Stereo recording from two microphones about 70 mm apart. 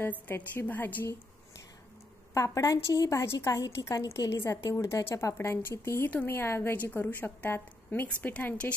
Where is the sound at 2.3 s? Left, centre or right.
Left.